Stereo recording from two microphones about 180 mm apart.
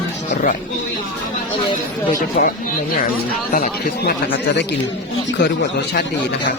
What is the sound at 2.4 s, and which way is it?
Speech, 50° left (ahead or behind).